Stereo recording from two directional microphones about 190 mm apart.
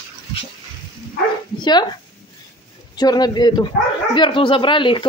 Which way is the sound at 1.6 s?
20° left (ahead or behind).